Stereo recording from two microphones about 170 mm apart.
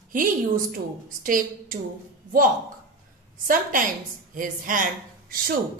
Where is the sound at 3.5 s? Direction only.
50° right (ahead or behind).